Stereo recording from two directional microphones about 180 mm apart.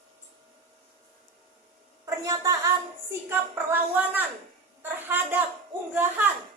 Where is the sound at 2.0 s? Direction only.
20° right (ahead or behind).